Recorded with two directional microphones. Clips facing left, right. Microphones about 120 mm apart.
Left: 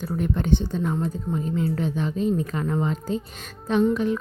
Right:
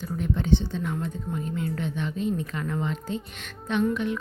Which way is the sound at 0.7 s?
40° left (ahead or behind).